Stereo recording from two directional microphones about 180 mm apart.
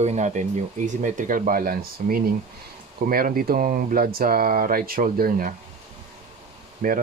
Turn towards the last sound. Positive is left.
turn(degrees=-50)  # may be behind; listen again after turning